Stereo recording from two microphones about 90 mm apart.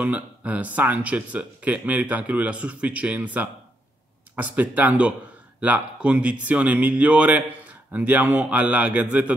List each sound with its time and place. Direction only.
0.0 s speech: 15° right (ahead or behind)